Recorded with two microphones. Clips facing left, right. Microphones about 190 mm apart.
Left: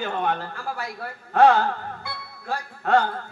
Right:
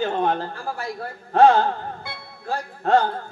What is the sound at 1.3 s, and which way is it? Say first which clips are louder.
Speech: right 2 dB; 30° right (ahead or behind).